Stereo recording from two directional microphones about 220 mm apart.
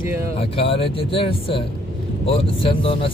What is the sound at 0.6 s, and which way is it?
Speech, 25° left (ahead or behind).